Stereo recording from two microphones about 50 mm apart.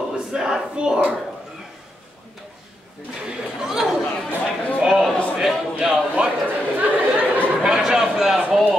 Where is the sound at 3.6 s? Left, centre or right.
Centre.